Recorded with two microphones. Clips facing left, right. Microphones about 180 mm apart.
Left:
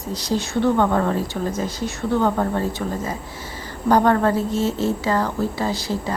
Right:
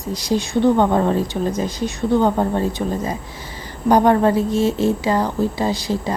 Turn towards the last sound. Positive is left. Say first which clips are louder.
# right 3 dB
turn(degrees=-15)  # may be behind; listen again after turning